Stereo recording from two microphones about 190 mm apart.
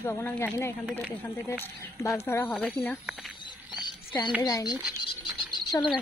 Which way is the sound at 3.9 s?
25° left (ahead or behind).